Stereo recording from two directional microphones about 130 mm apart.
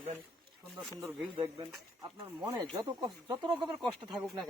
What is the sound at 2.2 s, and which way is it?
A man's voice, 25° right (ahead or behind).